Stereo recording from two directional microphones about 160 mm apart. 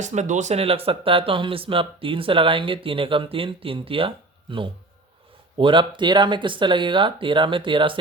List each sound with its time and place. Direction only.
0.0 s speech: 45° right (ahead or behind)
5.5 s speech: 30° right (ahead or behind)